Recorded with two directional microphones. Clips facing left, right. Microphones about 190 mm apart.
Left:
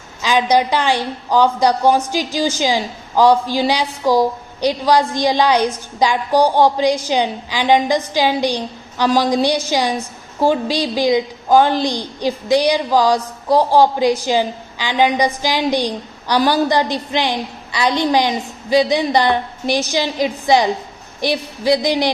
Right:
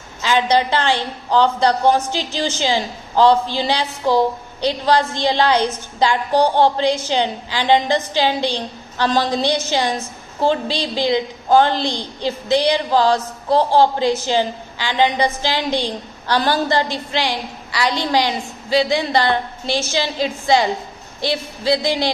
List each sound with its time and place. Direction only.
0.2 s a woman's voice: 15° left (ahead or behind)